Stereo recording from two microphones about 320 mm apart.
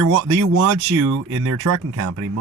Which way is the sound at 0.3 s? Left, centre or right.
Right.